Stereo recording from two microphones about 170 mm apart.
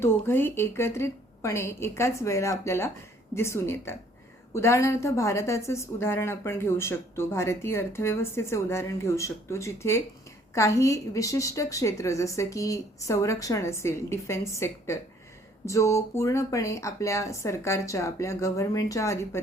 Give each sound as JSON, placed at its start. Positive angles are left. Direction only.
{"t": 0.0, "sound": "a woman's voice", "side_deg": 15}